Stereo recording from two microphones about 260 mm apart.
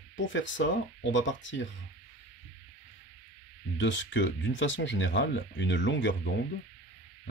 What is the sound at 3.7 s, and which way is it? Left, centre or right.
Speech, left.